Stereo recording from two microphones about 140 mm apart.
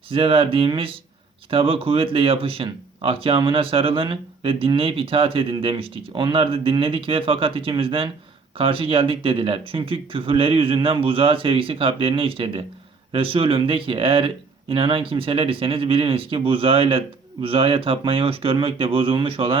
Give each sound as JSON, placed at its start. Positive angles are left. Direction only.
{"t": 0.1, "sound": "speech", "side_deg": -40}